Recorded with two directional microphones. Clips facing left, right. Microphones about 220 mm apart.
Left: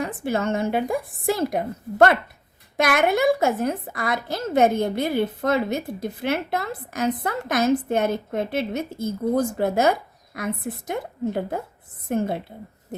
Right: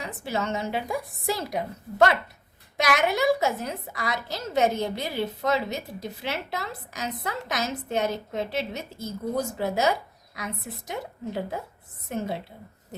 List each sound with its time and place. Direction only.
0.0 s a woman's voice: 50° left (ahead or behind)